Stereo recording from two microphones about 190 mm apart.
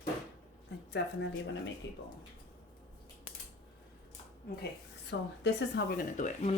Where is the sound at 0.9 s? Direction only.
75° left (ahead or behind).